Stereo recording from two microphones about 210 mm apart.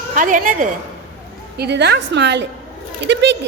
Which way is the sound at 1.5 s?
50° right (ahead or behind).